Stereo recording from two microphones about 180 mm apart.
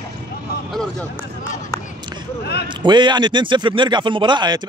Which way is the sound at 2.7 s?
25° right (ahead or behind).